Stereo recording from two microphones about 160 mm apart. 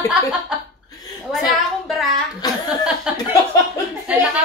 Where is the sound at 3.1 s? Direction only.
5° right (ahead or behind).